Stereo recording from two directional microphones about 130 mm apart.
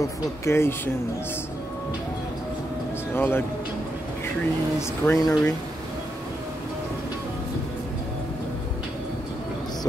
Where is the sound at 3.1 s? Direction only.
15° left (ahead or behind).